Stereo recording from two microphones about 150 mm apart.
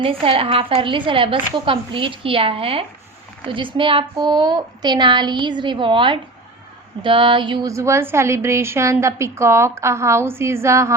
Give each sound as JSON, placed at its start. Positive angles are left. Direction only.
{"t": 0.0, "sound": "a woman's voice", "side_deg": -40}